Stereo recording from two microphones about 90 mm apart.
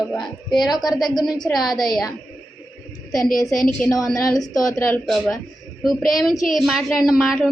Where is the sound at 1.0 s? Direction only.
50° left (ahead or behind).